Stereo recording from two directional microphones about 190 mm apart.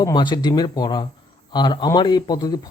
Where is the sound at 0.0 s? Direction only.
25° left (ahead or behind).